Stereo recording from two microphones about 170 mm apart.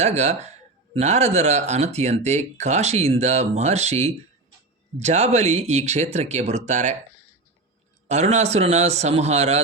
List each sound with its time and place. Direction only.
0.0 s speech: 40° right (ahead or behind)
8.0 s speech: 40° right (ahead or behind)